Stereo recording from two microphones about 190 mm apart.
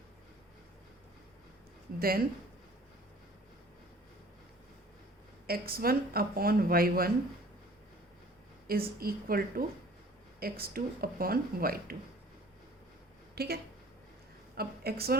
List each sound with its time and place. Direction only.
2.0 s speech: 50° right (ahead or behind)
5.5 s speech: 50° right (ahead or behind)
9.0 s speech: 50° right (ahead or behind)
13.3 s a woman's voice: 55° right (ahead or behind)